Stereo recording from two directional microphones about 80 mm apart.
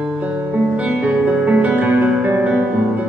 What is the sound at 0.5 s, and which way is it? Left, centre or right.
Music, centre.